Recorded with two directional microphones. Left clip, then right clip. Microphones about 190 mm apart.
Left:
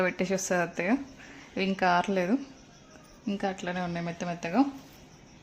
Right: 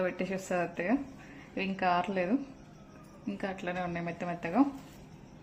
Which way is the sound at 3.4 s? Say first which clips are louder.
Left 3 dB; 60° left (ahead or behind).